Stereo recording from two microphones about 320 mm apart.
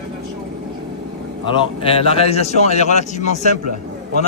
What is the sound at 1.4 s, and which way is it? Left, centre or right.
A man's voice, centre.